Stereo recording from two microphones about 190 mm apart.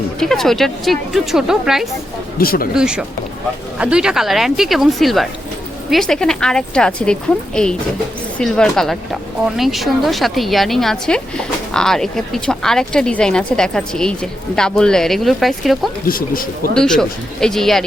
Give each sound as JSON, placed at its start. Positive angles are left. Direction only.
{"t": 0.2, "sound": "a woman's voice", "side_deg": 0}
{"t": 2.4, "sound": "speech", "side_deg": 50}
{"t": 2.7, "sound": "a woman's voice", "side_deg": -5}
{"t": 16.0, "sound": "speech", "side_deg": 50}
{"t": 16.7, "sound": "a woman's voice", "side_deg": 5}